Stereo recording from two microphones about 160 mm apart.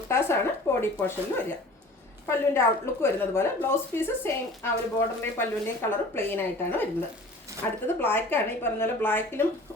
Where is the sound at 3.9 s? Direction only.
15° left (ahead or behind).